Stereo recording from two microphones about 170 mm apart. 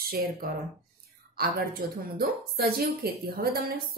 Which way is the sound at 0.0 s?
60° right (ahead or behind).